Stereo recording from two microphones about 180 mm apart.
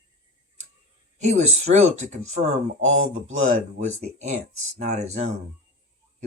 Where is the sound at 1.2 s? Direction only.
40° right (ahead or behind).